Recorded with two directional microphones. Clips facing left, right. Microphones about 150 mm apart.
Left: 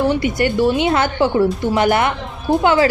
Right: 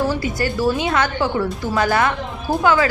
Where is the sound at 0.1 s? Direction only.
20° left (ahead or behind).